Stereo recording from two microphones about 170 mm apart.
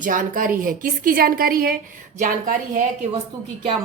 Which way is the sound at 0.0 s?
50° right (ahead or behind).